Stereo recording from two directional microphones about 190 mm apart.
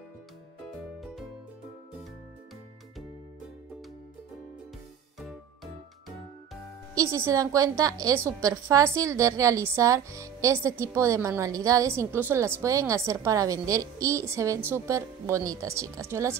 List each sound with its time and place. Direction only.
7.0 s a woman's voice: 15° right (ahead or behind)